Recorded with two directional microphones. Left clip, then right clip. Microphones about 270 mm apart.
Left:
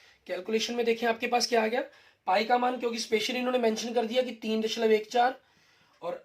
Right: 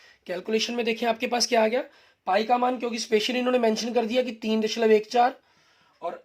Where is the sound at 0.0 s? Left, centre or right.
Right.